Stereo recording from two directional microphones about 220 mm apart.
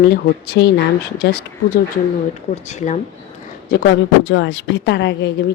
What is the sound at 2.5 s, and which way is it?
Speech, 30° left (ahead or behind).